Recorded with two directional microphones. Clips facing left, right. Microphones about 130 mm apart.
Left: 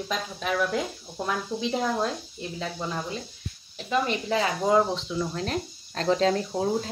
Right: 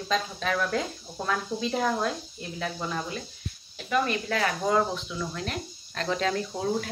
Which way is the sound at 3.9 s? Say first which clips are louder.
Left 1 dB; 20° left (ahead or behind).